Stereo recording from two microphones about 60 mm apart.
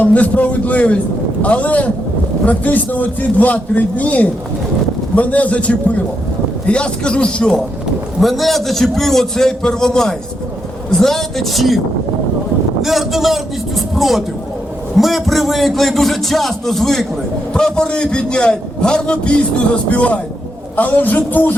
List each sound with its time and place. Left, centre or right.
0.0 s a man's voice: left
8.2 s a man's voice: centre
12.8 s a man's voice: centre; by 21.5 s left